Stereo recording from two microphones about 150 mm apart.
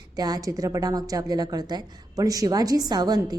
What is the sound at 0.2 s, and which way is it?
A woman's voice, 25° right (ahead or behind).